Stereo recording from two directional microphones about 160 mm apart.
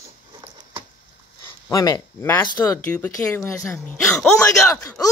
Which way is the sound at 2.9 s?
10° left (ahead or behind).